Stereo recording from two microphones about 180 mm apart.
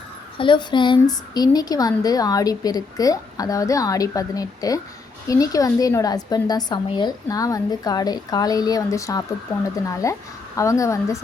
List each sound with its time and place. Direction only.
0.3 s a woman's voice: 25° left (ahead or behind)